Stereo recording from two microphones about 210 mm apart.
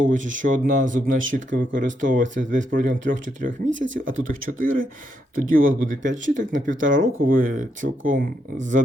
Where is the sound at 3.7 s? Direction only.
60° right (ahead or behind).